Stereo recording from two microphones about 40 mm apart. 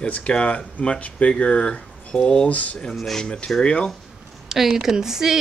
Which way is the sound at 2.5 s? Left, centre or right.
Left.